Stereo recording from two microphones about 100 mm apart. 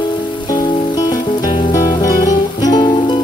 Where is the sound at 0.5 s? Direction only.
40° left (ahead or behind).